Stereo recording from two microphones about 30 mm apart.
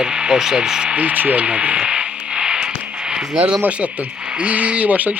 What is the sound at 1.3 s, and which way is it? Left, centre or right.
Speech, right.